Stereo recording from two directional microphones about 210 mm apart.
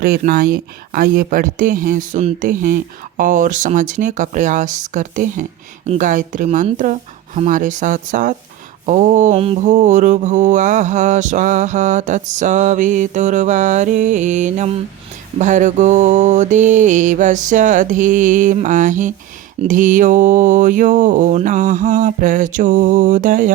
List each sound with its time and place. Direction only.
0.0 s speech: 45° right (ahead or behind)